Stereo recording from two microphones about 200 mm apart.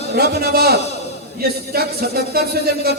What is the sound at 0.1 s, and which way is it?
A man's voice, 50° right (ahead or behind).